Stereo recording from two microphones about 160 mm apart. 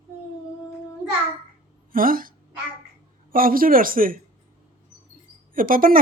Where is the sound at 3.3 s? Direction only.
65° right (ahead or behind).